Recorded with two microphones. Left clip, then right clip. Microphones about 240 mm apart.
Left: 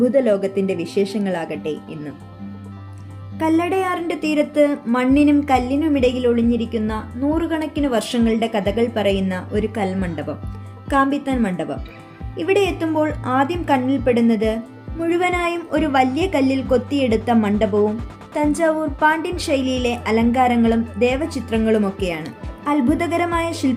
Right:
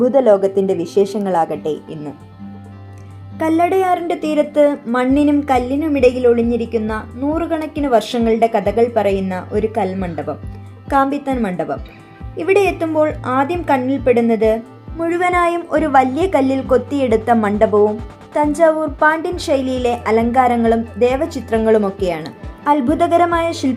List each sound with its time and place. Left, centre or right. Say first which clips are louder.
0.0 s speech: right 3 dB; right
0.5 s speech: right 5 dB; centre
1.2 s speech: right 8 dB; right
3.3 s speech: right 4 dB; centre